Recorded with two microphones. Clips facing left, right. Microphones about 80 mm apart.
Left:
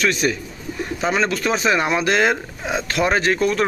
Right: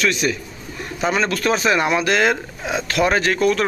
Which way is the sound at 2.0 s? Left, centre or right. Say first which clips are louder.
Even; left.